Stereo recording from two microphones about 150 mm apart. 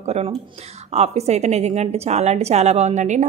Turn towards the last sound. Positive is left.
turn(degrees=-50)  # may be behind; listen again after turning